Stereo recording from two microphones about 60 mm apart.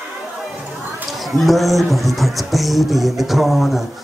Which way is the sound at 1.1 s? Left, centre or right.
Centre.